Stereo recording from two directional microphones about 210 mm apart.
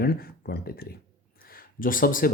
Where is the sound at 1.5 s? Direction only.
40° left (ahead or behind).